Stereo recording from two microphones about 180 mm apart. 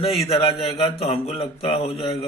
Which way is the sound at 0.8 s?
30° left (ahead or behind).